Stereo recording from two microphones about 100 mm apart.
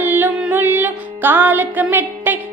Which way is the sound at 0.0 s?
20° right (ahead or behind).